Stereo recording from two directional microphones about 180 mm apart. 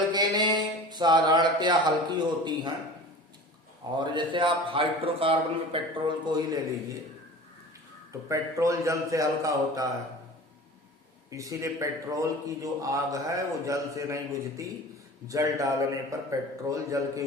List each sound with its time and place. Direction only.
0.1 s speech: 25° right (ahead or behind)
3.9 s a man's voice: 25° right (ahead or behind)
8.3 s a man's voice: 15° right (ahead or behind)
11.3 s a man's voice: 20° right (ahead or behind)
15.3 s a man's voice: 20° right (ahead or behind)